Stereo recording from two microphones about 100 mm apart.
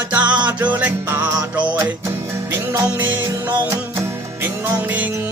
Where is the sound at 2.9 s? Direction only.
20° right (ahead or behind).